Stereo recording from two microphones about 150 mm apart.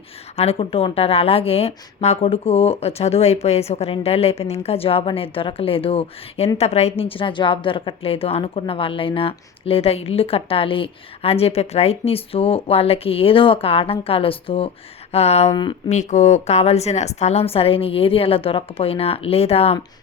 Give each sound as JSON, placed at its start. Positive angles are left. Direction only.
{"t": 0.3, "sound": "a woman's voice", "side_deg": 40}
{"t": 15.1, "sound": "a sound", "side_deg": 45}
{"t": 15.9, "sound": "a woman's voice", "side_deg": 50}